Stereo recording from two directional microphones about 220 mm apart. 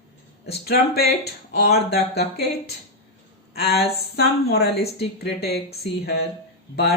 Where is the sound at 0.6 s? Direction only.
45° left (ahead or behind).